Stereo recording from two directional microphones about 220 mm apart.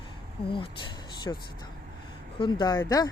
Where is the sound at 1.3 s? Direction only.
15° left (ahead or behind).